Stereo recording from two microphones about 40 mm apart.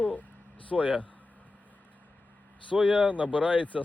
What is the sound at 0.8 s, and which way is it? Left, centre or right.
Speech, right.